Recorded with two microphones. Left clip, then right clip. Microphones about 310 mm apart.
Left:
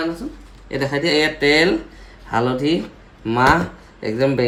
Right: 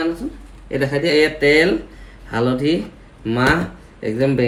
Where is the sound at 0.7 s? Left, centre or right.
Centre.